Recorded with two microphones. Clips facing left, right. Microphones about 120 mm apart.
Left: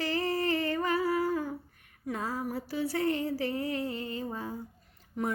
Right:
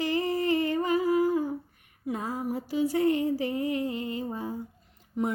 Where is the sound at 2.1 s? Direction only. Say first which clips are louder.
Right 3 dB; 20° right (ahead or behind).